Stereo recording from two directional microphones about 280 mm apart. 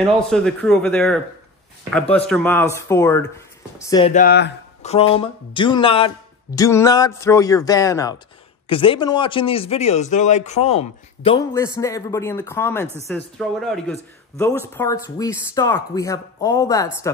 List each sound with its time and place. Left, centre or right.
0.0 s a man's voice: centre
4.1 s speech: left
4.8 s a man's voice: left; by 13.9 s centre
14.8 s a man's voice: centre